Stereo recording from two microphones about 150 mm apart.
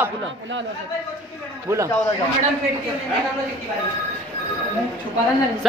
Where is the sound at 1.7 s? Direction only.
20° right (ahead or behind).